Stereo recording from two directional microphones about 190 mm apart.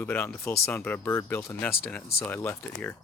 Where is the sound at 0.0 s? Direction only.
10° left (ahead or behind).